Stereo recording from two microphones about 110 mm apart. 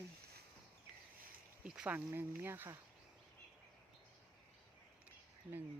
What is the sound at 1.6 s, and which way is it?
Speech, 10° right (ahead or behind).